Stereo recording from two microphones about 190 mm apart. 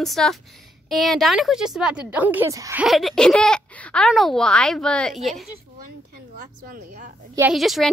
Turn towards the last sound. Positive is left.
turn(degrees=0)  # may be behind; listen again after turning